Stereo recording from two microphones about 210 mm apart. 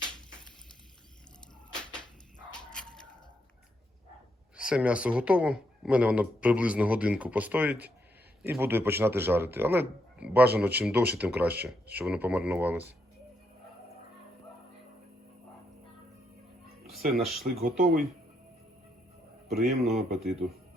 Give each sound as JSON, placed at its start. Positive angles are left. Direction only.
{"t": 2.5, "sound": "a sound", "side_deg": 5}
{"t": 4.5, "sound": "speech", "side_deg": -5}
{"t": 17.2, "sound": "speech", "side_deg": 0}
{"t": 17.6, "sound": "speech", "side_deg": -45}
{"t": 19.5, "sound": "a man's voice", "side_deg": 0}